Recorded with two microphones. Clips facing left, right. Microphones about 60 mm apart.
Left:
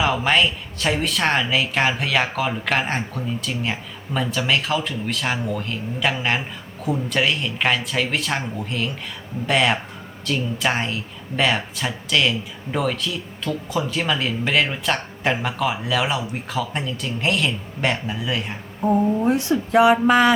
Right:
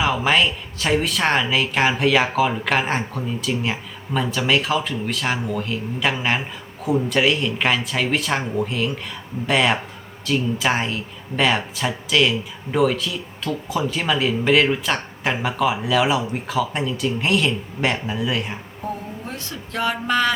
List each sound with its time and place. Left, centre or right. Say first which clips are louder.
0.0 s speech: even; centre
18.8 s speech: left 13 dB; left